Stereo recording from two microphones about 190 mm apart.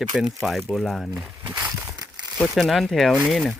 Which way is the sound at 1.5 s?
5° right (ahead or behind).